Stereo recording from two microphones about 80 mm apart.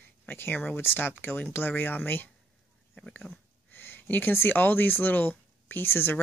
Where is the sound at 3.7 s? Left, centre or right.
Left.